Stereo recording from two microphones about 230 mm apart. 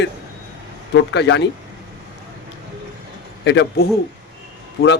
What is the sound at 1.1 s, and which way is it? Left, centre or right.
Speech, left.